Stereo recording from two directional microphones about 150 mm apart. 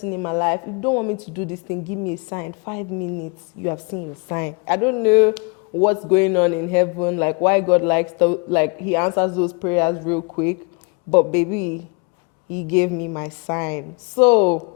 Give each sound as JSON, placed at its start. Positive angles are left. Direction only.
{"t": 0.0, "sound": "a woman's voice", "side_deg": 20}
{"t": 12.7, "sound": "a man's voice", "side_deg": 15}